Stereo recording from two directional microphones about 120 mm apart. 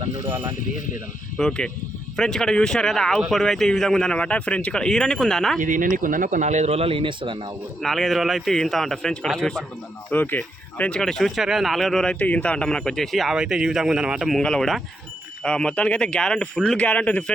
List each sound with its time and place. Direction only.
0.3 s speech: 20° right (ahead or behind)
1.4 s speech: 5° left (ahead or behind)
5.5 s speech: 90° right; by 7.5 s 40° right (ahead or behind)
7.8 s speech: centre (ahead or behind)
10.1 s speech: 15° left (ahead or behind)